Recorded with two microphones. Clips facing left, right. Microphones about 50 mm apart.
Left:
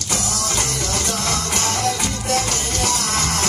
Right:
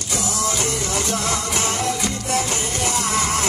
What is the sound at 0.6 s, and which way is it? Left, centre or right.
Music, right.